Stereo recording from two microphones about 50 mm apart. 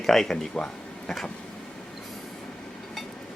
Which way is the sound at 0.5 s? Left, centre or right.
Centre.